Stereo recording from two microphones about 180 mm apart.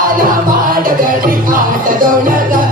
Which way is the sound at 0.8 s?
50° right (ahead or behind).